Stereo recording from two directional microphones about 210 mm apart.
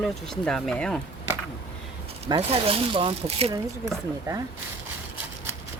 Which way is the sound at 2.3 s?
25° right (ahead or behind).